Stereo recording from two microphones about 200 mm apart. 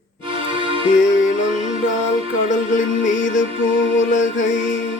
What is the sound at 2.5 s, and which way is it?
Music, 40° left (ahead or behind).